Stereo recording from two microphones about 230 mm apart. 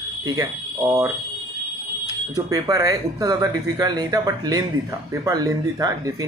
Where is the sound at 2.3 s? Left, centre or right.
Centre.